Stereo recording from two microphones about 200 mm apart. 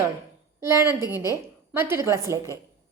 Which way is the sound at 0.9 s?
15° left (ahead or behind).